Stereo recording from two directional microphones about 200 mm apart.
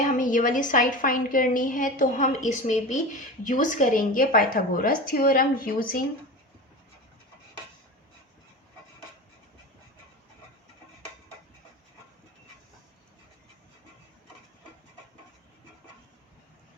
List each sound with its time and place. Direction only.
0.0 s a woman's voice: 40° left (ahead or behind)